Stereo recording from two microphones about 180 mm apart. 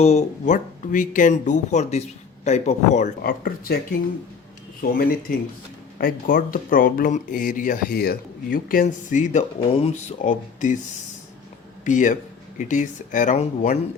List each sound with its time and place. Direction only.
0.0 s speech: 35° left (ahead or behind); by 3.8 s 55° left (ahead or behind)
4.8 s speech: 55° left (ahead or behind)
6.0 s speech: 50° left (ahead or behind)